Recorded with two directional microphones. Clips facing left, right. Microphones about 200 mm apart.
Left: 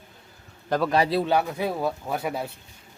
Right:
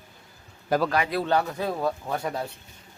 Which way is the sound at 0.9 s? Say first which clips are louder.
Left 4 dB; 30° left (ahead or behind).